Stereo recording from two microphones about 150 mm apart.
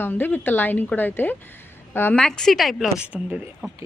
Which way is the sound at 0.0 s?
15° left (ahead or behind).